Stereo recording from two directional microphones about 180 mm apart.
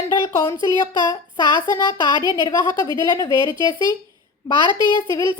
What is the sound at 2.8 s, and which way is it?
Speech, 20° left (ahead or behind).